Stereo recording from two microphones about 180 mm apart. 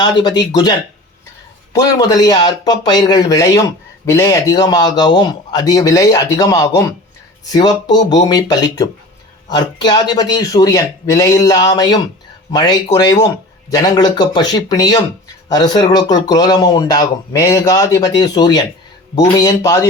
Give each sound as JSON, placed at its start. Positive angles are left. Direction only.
{"t": 0.0, "sound": "speech", "side_deg": 25}